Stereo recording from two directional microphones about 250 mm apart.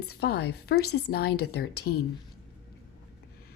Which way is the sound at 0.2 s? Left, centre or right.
Left.